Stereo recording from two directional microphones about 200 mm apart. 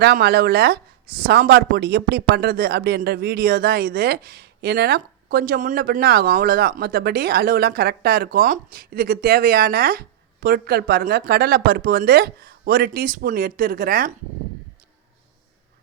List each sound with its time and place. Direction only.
0.0 s speech: 50° right (ahead or behind)